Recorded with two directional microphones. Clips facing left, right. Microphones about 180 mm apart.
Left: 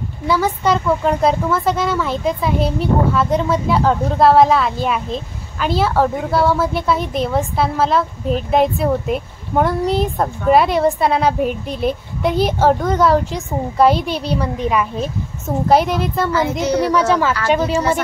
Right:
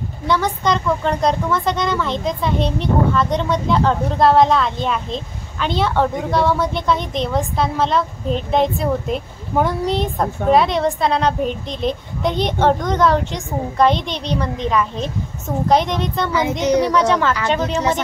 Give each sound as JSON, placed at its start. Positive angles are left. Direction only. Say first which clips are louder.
{"t": 0.3, "sound": "speech", "louder": "left 2 dB", "side_deg": 5}
{"t": 16.3, "sound": "a child's voice", "louder": "even", "side_deg": -15}
{"t": 16.8, "sound": "speech", "louder": "left 1 dB", "side_deg": 5}